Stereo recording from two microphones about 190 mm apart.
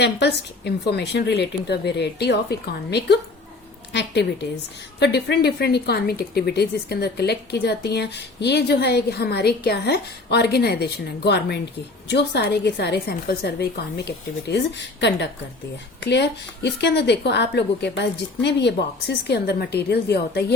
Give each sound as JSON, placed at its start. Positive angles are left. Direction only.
{"t": 0.0, "sound": "a woman's voice", "side_deg": 60}